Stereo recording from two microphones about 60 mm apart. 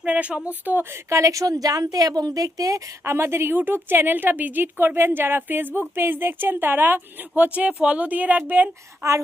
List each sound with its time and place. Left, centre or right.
0.0 s speech: right
1.1 s a woman's voice: right
3.0 s a woman's voice: right